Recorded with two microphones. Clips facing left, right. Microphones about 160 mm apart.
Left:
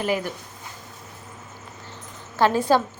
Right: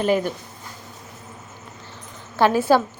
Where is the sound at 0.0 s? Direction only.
25° right (ahead or behind).